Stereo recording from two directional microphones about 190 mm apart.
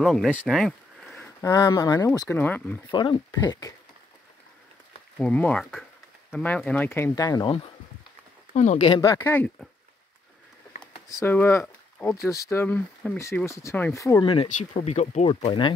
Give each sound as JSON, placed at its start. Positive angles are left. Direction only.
{"t": 0.0, "sound": "speech", "side_deg": 0}
{"t": 1.4, "sound": "speech", "side_deg": 20}
{"t": 2.9, "sound": "speech", "side_deg": 25}
{"t": 5.2, "sound": "speech", "side_deg": 5}
{"t": 8.8, "sound": "speech", "side_deg": 20}
{"t": 11.1, "sound": "speech", "side_deg": 15}
{"t": 14.2, "sound": "speech", "side_deg": 30}